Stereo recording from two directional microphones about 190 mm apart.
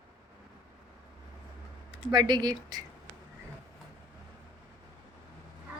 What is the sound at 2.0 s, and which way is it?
Speech, 25° right (ahead or behind).